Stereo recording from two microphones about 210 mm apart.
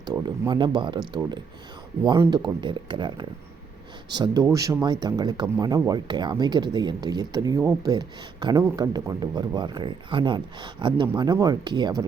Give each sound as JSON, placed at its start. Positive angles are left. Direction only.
{"t": 0.0, "sound": "speech", "side_deg": -20}